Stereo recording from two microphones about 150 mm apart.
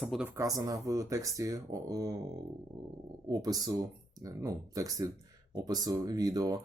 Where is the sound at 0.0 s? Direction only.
Centre (ahead or behind).